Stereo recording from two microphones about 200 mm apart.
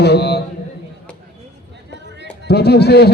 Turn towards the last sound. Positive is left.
turn(degrees=55)  # may be behind; listen again after turning